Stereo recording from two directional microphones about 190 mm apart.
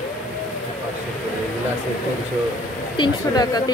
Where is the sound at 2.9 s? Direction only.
20° left (ahead or behind).